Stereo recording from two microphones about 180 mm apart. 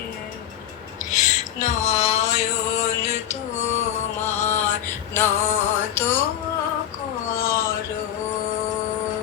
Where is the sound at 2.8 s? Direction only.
40° left (ahead or behind).